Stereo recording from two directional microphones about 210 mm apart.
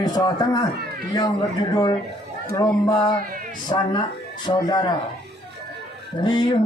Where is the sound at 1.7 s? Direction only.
20° left (ahead or behind).